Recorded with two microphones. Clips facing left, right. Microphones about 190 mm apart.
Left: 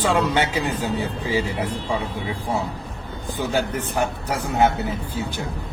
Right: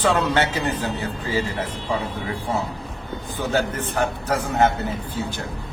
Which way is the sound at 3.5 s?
10° left (ahead or behind).